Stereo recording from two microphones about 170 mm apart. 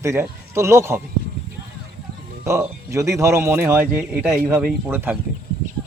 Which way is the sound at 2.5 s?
15° right (ahead or behind).